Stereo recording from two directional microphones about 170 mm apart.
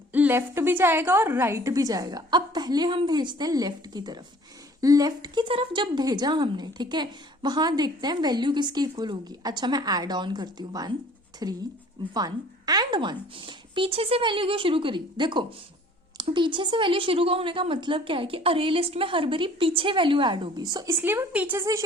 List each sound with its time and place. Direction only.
0.1 s a woman's voice: 10° right (ahead or behind)
21.0 s speech: 10° right (ahead or behind)